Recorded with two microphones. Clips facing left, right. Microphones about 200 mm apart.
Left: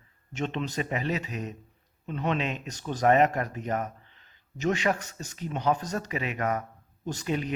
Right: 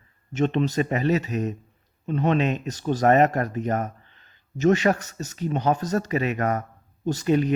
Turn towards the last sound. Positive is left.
turn(degrees=-45)  # may be behind; listen again after turning